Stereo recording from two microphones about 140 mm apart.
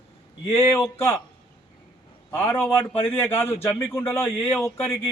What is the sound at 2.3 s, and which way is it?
A man's voice, 15° left (ahead or behind).